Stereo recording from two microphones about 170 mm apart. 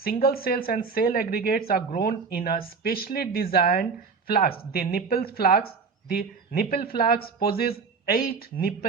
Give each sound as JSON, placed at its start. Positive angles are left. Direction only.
{"t": 0.0, "sound": "speech", "side_deg": 65}